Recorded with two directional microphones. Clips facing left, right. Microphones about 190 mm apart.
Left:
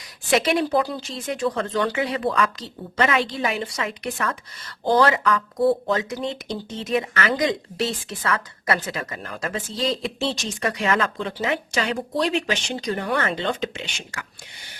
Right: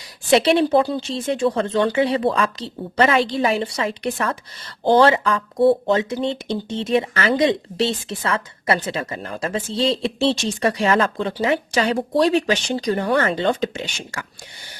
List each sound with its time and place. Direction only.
0.3 s a woman's voice: 30° right (ahead or behind)